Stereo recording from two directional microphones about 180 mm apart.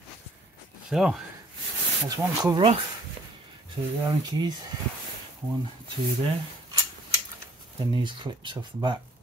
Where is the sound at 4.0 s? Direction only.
25° right (ahead or behind).